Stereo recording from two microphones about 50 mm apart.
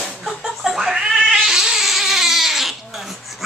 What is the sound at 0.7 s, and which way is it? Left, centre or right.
Cat, centre.